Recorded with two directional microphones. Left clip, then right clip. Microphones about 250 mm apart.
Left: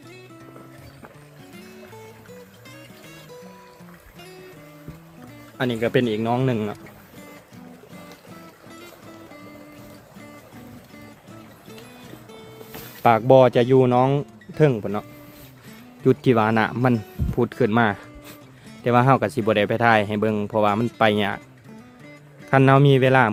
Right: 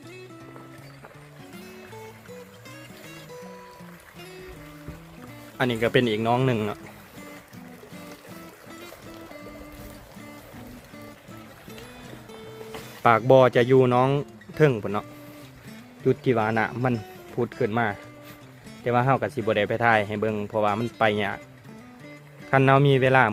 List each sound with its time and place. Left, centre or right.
5.5 s speech: centre
13.0 s speech: centre
16.0 s speech: centre
22.4 s speech: centre